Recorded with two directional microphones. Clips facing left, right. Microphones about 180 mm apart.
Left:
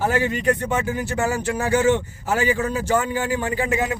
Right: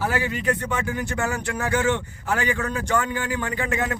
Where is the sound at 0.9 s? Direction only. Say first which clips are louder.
Left 3 dB; 30° left (ahead or behind).